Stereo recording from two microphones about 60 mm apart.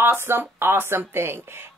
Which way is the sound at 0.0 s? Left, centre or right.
Right.